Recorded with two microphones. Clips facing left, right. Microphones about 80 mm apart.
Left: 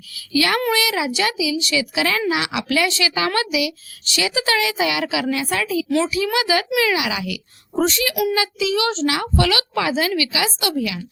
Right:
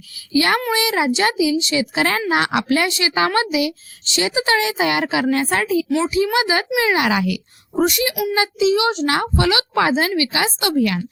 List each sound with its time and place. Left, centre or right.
0.3 s child singing: right
1.1 s a woman's voice: right
6.1 s child singing: right
6.7 s a woman's voice: right
7.8 s a child's voice: centre
8.4 s child singing: right
9.0 s a woman's voice: right
9.3 s child singing: right
9.8 s a woman's voice: right